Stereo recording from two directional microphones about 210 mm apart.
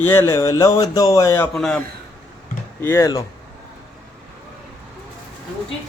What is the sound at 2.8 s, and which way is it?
Speech, 15° left (ahead or behind).